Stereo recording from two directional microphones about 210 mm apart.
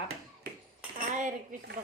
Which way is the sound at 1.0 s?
35° right (ahead or behind).